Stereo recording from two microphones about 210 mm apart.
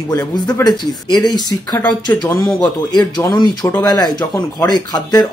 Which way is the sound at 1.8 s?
5° left (ahead or behind).